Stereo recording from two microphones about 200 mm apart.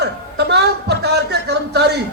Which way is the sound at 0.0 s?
55° right (ahead or behind).